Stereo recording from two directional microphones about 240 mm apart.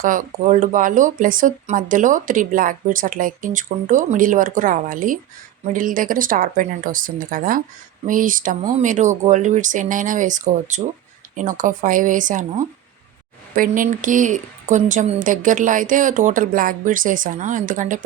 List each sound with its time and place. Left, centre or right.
0.0 s speech: right